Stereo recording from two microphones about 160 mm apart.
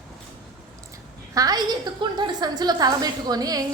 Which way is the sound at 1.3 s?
25° right (ahead or behind).